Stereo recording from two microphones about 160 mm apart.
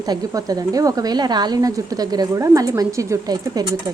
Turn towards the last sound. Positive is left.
turn(degrees=-20)  # may be behind; listen again after turning